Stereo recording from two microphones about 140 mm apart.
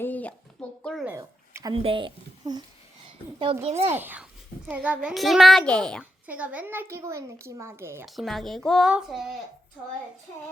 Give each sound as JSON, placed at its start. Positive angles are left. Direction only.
{"t": 0.0, "sound": "a sound", "side_deg": 10}
{"t": 1.0, "sound": "a sound", "side_deg": -20}
{"t": 1.7, "sound": "a child's voice", "side_deg": -40}
{"t": 3.8, "sound": "a child's voice", "side_deg": -15}
{"t": 6.0, "sound": "speech", "side_deg": -10}
{"t": 8.0, "sound": "a child's voice", "side_deg": 0}